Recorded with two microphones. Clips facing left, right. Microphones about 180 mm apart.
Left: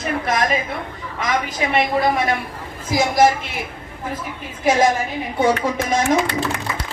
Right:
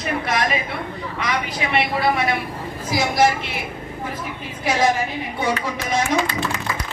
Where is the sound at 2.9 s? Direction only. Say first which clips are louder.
Left 3 dB; 45° left (ahead or behind).